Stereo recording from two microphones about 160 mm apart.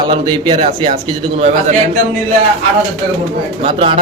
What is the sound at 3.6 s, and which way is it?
Speech, 35° right (ahead or behind).